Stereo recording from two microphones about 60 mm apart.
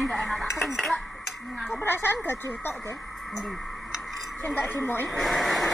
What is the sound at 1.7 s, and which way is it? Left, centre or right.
Speech, left.